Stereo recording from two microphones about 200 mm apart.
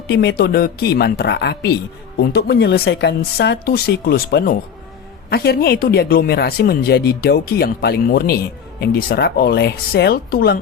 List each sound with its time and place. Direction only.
0.1 s speech: 55° left (ahead or behind)